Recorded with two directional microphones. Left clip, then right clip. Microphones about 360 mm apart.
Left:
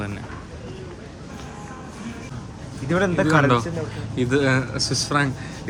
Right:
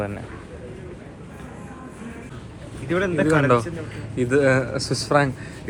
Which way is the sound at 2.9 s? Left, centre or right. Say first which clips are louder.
Left 1 dB; left.